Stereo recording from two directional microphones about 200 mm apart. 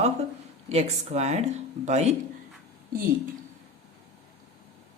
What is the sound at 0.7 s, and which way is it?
Speech, 30° right (ahead or behind).